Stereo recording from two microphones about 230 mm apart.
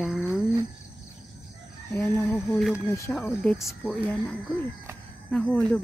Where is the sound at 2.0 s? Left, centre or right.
Centre.